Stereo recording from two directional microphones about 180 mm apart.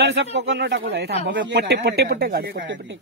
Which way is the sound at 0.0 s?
75° right (ahead or behind).